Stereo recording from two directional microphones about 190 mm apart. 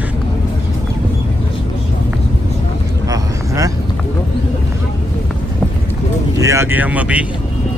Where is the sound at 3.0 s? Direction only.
20° right (ahead or behind).